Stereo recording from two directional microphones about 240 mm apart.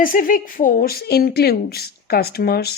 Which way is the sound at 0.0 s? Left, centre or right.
Left.